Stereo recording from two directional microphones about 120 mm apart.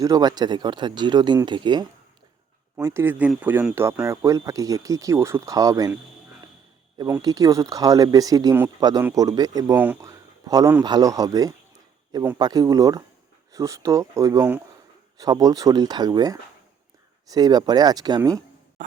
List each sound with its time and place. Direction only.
0.0 s speech: 30° right (ahead or behind)
2.7 s speech: 25° right (ahead or behind)
4.0 s speech: 25° right (ahead or behind)
7.2 s speech: 30° right (ahead or behind)
9.7 s speech: 15° right (ahead or behind)
10.0 s a sound: 30° right (ahead or behind)
10.8 s speech: 35° right (ahead or behind)
18.8 s a sound: 90° right